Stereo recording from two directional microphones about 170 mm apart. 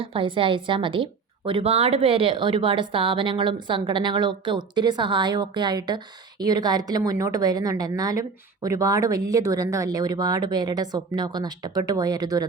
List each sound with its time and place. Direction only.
0.0 s a woman's voice: 30° right (ahead or behind)